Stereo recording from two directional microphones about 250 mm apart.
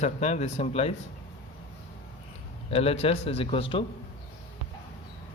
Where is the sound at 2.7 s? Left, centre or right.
Left.